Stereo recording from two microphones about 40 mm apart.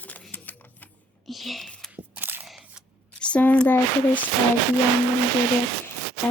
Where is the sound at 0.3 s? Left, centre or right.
Left.